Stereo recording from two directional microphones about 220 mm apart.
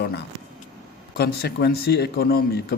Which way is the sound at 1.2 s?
45° left (ahead or behind).